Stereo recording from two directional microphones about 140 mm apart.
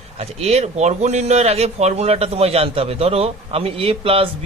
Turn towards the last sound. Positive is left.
turn(degrees=-40)  # may be behind; listen again after turning